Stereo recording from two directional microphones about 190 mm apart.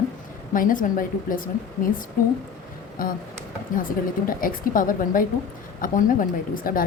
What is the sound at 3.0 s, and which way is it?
Speech, 50° left (ahead or behind).